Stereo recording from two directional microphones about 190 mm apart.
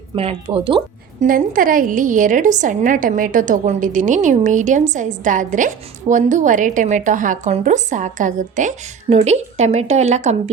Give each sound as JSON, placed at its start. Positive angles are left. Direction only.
{"t": 0.2, "sound": "speech", "side_deg": -30}
{"t": 1.2, "sound": "a woman's voice", "side_deg": -45}